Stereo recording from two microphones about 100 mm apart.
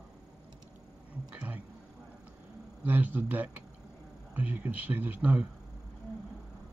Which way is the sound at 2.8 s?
15° right (ahead or behind).